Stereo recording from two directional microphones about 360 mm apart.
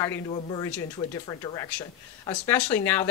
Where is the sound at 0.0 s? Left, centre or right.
Centre.